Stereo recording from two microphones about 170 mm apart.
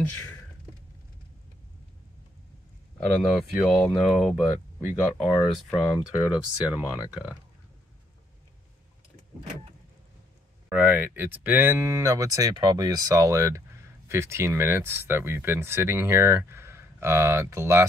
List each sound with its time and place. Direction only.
3.0 s speech: centre (ahead or behind)
5.5 s speech: centre (ahead or behind)
10.7 s speech: 10° right (ahead or behind)